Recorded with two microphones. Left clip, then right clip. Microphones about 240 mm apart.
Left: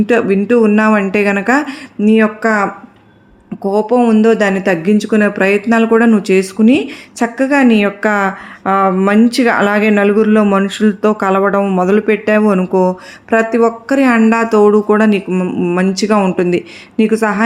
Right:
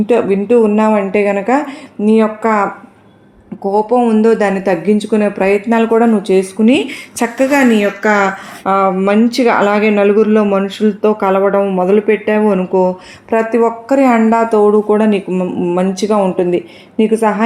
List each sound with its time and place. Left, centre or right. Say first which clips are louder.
0.0 s speech: even; left